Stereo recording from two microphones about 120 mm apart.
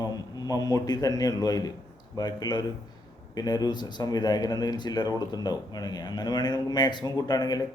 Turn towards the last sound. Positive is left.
turn(degrees=35)  # may be behind; listen again after turning